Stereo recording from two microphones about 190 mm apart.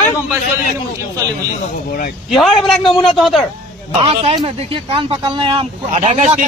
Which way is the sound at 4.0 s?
30° right (ahead or behind).